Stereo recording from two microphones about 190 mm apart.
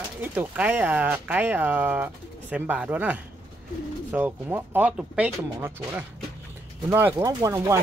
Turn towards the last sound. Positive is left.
turn(degrees=-15)  # may be behind; listen again after turning